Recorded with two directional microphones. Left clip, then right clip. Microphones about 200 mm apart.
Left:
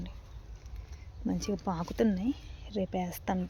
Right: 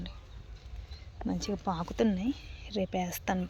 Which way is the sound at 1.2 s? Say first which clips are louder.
Even; 15° left (ahead or behind).